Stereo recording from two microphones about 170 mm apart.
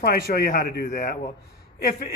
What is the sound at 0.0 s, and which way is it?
Speech, 65° left (ahead or behind).